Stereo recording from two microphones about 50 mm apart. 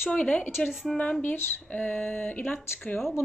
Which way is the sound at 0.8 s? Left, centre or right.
Centre.